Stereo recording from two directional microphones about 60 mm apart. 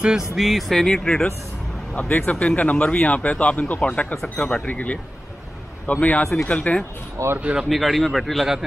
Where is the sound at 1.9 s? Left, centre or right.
Left.